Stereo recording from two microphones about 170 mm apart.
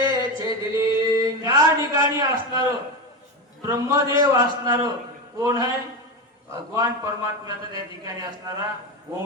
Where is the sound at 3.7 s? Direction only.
20° right (ahead or behind).